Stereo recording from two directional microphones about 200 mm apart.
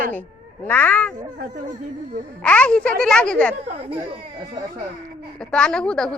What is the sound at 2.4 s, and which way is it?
A woman's voice, 5° left (ahead or behind).